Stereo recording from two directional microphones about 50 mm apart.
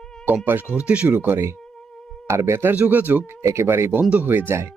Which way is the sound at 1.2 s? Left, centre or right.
Right.